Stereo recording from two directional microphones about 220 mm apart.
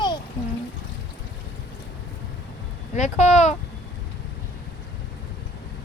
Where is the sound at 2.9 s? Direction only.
30° left (ahead or behind).